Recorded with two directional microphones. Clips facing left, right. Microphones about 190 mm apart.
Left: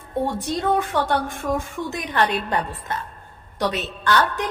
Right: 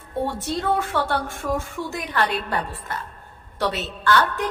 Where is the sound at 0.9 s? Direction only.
15° left (ahead or behind).